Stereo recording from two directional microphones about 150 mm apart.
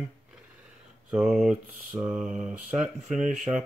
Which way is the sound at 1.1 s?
Centre (ahead or behind).